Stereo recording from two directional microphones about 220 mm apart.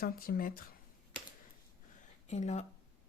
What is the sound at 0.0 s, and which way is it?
Speech, 40° left (ahead or behind).